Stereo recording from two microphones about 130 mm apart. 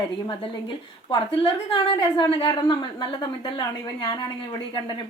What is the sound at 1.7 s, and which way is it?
A woman's voice, 40° left (ahead or behind).